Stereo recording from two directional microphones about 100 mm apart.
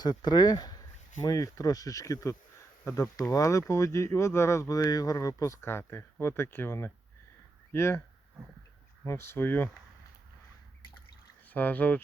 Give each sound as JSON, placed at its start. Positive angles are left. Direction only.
{"t": 0.0, "sound": "speech", "side_deg": 45}
{"t": 9.0, "sound": "speech", "side_deg": 25}
{"t": 11.4, "sound": "speech", "side_deg": 15}